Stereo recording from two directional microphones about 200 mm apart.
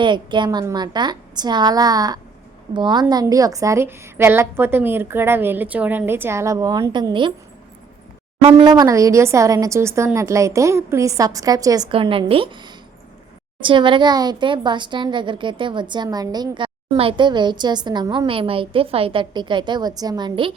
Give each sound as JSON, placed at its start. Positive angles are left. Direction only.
{"t": 0.0, "sound": "a woman's voice", "side_deg": -25}
{"t": 8.4, "sound": "a woman's voice", "side_deg": -30}